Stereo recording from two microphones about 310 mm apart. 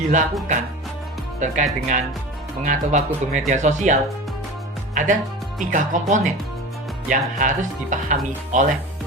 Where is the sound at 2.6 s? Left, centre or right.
Right.